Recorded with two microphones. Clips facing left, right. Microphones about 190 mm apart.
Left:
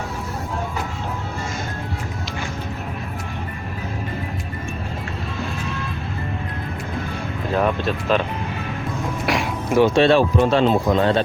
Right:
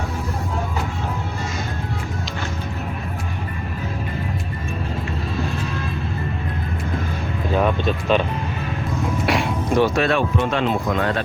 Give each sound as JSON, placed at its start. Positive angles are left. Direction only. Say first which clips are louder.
{"t": 7.5, "sound": "a sound", "louder": "right 1 dB", "side_deg": 0}
{"t": 9.2, "sound": "music", "louder": "even", "side_deg": 0}
{"t": 9.8, "sound": "speech", "louder": "left 8 dB", "side_deg": 30}